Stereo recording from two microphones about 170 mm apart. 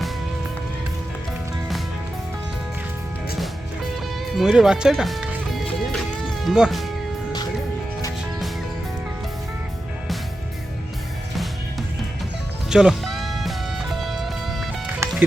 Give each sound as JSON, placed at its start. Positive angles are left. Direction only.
{"t": 4.4, "sound": "music", "side_deg": -5}
{"t": 12.7, "sound": "music", "side_deg": -5}
{"t": 15.0, "sound": "music", "side_deg": -15}